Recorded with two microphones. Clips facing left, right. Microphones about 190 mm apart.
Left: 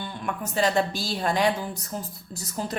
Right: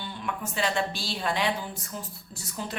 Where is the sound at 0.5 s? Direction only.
40° left (ahead or behind).